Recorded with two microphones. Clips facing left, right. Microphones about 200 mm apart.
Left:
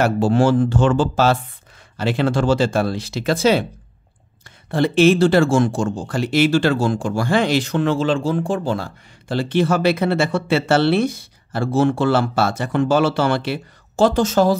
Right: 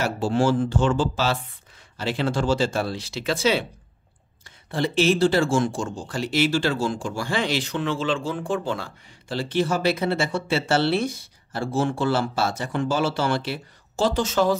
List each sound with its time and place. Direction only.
0.0 s speech: 60° left (ahead or behind); by 3.6 s 45° left (ahead or behind)
4.6 s speech: 55° left (ahead or behind); by 8.9 s 40° left (ahead or behind)
9.3 s speech: 60° left (ahead or behind); by 14.6 s 40° left (ahead or behind)